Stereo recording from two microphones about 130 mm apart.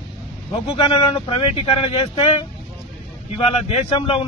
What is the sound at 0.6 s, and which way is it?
Speech, 45° left (ahead or behind).